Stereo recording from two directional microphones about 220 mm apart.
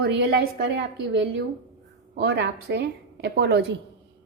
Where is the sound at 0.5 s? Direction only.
50° right (ahead or behind).